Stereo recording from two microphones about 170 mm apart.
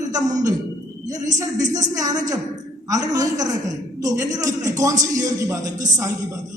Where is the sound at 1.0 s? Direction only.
20° right (ahead or behind).